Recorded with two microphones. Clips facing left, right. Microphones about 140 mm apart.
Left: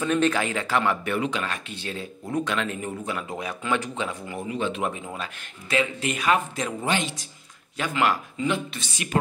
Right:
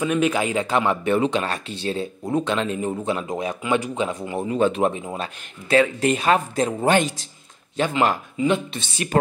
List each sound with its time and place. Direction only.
0.0 s speech: 10° right (ahead or behind)
4.5 s speech: 40° right (ahead or behind)
7.7 s speech: 25° right (ahead or behind)